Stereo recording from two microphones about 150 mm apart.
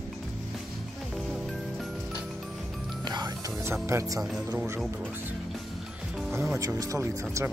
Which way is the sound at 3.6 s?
15° right (ahead or behind).